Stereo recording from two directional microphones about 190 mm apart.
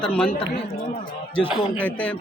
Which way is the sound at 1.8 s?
5° left (ahead or behind).